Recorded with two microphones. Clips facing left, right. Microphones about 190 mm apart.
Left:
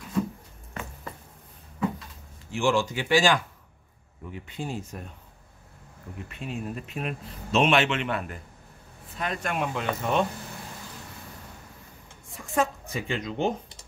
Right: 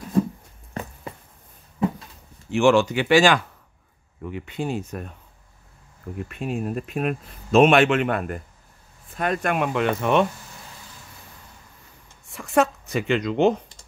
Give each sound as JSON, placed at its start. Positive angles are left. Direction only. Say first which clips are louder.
{"t": 2.5, "sound": "speech", "louder": "right 7 dB", "side_deg": -70}
{"t": 6.2, "sound": "speech", "louder": "right 6 dB", "side_deg": -55}
{"t": 12.3, "sound": "speech", "louder": "right 6 dB", "side_deg": -75}